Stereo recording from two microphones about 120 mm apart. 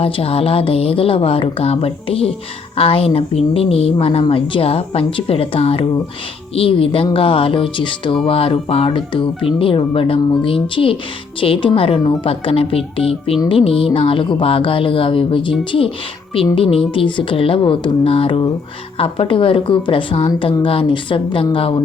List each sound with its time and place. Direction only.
0.0 s speech: 55° left (ahead or behind)
16.6 s speech: 50° left (ahead or behind)